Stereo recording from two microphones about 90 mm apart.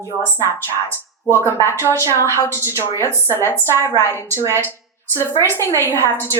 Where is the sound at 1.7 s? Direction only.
30° left (ahead or behind).